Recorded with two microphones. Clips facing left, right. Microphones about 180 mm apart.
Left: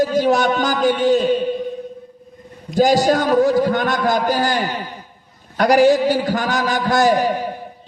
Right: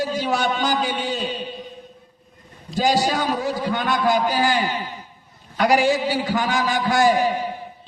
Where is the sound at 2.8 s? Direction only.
45° left (ahead or behind).